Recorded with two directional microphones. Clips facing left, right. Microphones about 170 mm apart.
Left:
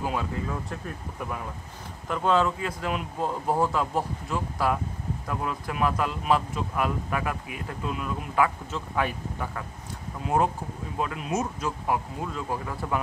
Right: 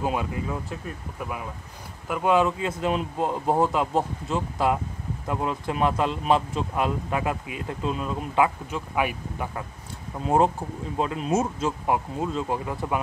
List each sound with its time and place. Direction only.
0.0 s speech: 15° right (ahead or behind)
0.7 s speech: 5° right (ahead or behind); by 8.5 s 25° right (ahead or behind)
8.7 s speech: 15° right (ahead or behind)
10.2 s speech: 25° right (ahead or behind)